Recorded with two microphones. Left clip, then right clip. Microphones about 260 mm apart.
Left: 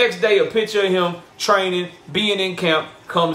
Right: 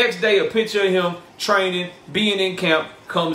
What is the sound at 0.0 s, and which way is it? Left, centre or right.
A man's voice, centre.